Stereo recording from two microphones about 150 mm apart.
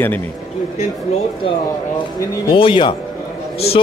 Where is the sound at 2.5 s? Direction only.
35° left (ahead or behind).